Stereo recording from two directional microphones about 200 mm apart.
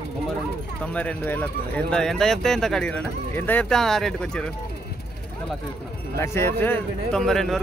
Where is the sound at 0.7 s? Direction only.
5° left (ahead or behind).